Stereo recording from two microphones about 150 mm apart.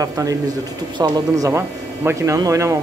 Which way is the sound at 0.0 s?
25° right (ahead or behind).